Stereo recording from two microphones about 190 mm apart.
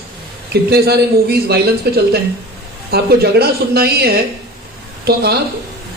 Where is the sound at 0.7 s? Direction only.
55° right (ahead or behind).